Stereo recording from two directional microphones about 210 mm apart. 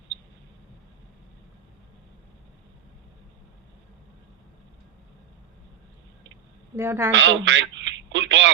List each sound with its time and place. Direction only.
6.7 s a woman's voice: 10° right (ahead or behind)
7.1 s telephone: 60° right (ahead or behind)